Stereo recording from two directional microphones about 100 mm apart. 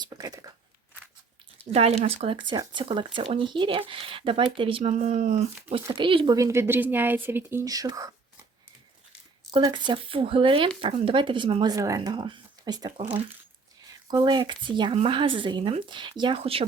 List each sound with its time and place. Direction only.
0.0 s speech: 40° right (ahead or behind)
1.7 s speech: 90° right
6.0 s speech: 55° right (ahead or behind)
6.3 s speech: 30° right (ahead or behind)
7.6 s speech: 40° right (ahead or behind)
9.5 s speech: 45° right (ahead or behind); by 11.6 s 60° right (ahead or behind)
11.6 s speech: 35° right (ahead or behind)
14.1 s speech: 45° right (ahead or behind)
14.9 s speech: 60° right (ahead or behind)
16.4 s speech: 70° right (ahead or behind)